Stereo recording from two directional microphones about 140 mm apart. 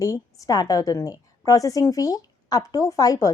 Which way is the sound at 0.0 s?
25° left (ahead or behind).